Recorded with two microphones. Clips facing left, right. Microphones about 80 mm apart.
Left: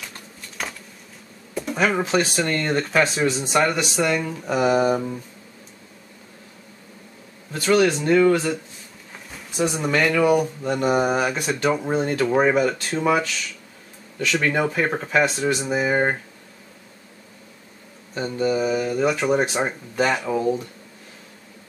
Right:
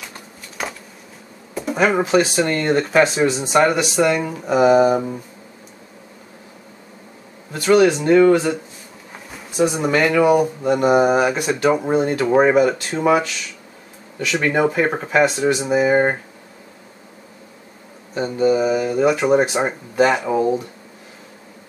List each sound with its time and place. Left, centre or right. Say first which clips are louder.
0.1 s a sound: right 3 dB; centre
2.0 s speech: right 5 dB; centre
7.5 s speech: right 4 dB; centre
12.3 s speech: right 5 dB; centre
12.5 s speech: right 5 dB; centre
14.4 s speech: right 6 dB; centre
18.1 s speech: right 5 dB; centre